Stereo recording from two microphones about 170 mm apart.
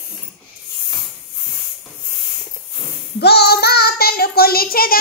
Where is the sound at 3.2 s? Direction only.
75° left (ahead or behind).